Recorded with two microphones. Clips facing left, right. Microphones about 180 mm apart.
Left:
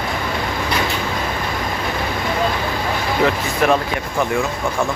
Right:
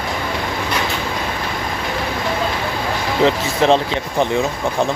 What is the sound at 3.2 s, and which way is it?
Speech, 25° right (ahead or behind).